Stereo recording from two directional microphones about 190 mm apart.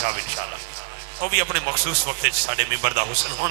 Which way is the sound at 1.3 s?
15° right (ahead or behind).